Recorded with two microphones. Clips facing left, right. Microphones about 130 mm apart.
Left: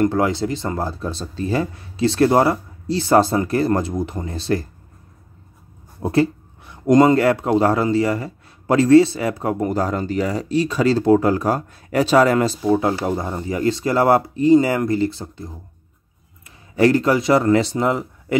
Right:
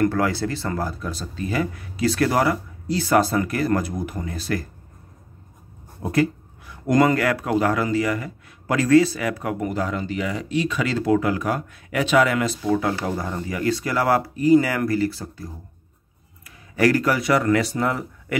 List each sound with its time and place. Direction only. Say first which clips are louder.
0.0 s speech: left 3 dB; 20° left (ahead or behind)
6.0 s speech: left 3 dB; 30° left (ahead or behind)